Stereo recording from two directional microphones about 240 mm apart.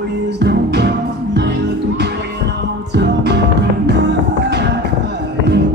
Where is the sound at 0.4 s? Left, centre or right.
Right.